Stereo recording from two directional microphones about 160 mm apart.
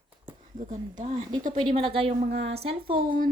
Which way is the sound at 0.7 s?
50° right (ahead or behind).